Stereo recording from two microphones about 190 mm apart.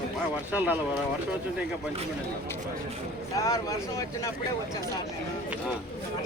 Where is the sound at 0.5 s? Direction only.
10° right (ahead or behind).